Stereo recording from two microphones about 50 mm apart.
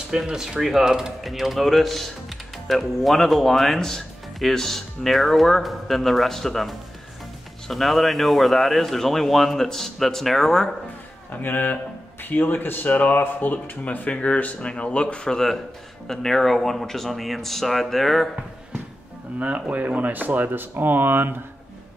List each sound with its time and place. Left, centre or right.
0.3 s speech: centre
11.4 s speech: left; by 18.3 s centre
19.7 s speech: right